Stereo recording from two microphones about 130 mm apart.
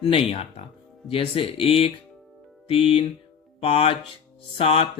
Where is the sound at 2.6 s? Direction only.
45° left (ahead or behind).